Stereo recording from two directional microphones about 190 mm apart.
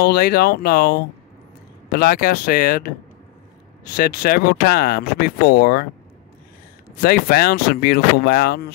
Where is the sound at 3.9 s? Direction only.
50° left (ahead or behind).